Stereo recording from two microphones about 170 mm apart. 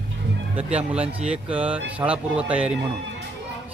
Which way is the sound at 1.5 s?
10° right (ahead or behind).